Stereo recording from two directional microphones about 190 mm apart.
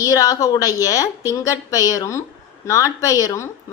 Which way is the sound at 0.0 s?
20° left (ahead or behind).